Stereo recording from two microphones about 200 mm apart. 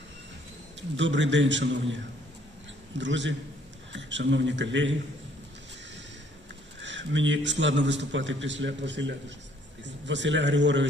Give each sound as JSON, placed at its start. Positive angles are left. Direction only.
{"t": 0.8, "sound": "a man's voice", "side_deg": -65}
{"t": 3.0, "sound": "a man's voice", "side_deg": -65}
{"t": 6.8, "sound": "a man's voice", "side_deg": -65}